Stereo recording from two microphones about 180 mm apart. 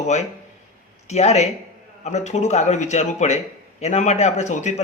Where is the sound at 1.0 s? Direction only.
40° left (ahead or behind).